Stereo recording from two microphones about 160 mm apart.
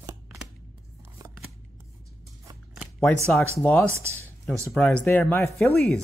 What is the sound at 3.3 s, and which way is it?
Speech, 15° left (ahead or behind).